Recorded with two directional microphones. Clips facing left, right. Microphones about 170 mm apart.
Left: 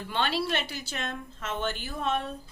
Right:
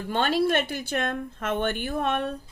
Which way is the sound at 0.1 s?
45° right (ahead or behind).